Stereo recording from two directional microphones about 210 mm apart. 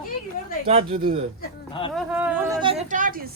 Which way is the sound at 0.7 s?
30° right (ahead or behind).